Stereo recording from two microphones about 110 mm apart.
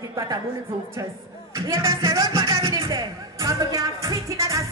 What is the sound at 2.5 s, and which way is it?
Speech, 50° right (ahead or behind).